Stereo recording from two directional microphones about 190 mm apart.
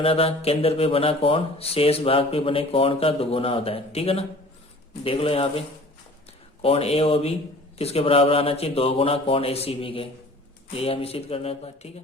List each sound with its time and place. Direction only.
0.0 s speech: 30° left (ahead or behind)